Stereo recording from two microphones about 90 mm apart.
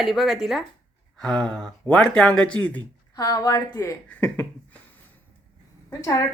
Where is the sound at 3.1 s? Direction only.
40° left (ahead or behind).